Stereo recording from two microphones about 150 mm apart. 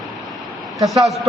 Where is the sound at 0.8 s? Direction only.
Centre (ahead or behind).